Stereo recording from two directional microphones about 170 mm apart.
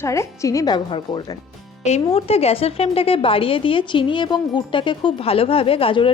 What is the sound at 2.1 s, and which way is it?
A woman's voice, 35° left (ahead or behind).